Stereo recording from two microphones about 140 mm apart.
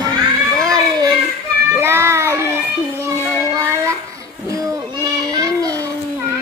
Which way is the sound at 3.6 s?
20° right (ahead or behind).